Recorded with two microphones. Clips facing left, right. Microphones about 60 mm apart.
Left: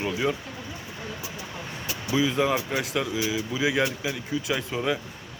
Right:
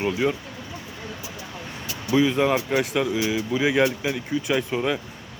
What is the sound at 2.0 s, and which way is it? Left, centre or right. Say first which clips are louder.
Speech: right 4 dB; centre.